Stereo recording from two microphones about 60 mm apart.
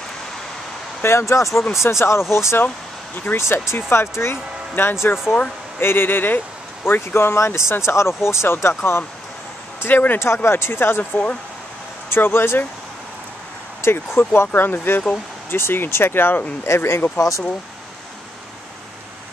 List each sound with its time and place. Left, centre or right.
1.0 s speech: left
9.8 s speech: left
12.1 s speech: left
13.8 s speech: left
16.6 s speech: left